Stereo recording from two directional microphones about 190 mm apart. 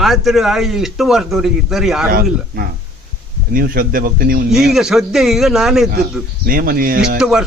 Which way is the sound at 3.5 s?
50° right (ahead or behind).